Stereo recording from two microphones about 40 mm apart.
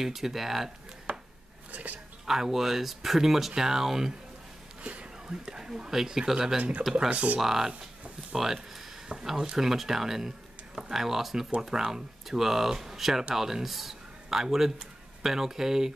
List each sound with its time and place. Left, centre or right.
0.0 s speech: centre
1.1 s chopping: right
1.7 s speech: right
2.2 s speech: centre
5.4 s speech: centre
7.1 s speech: right
7.3 s a man's voice: centre